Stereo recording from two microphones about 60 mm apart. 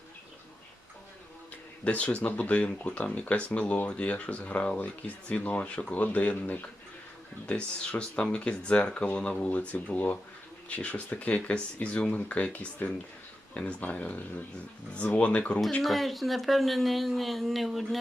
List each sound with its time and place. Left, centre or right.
1.8 s speech: left
15.8 s speech: centre